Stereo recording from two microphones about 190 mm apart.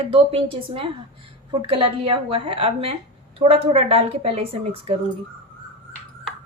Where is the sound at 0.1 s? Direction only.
30° right (ahead or behind).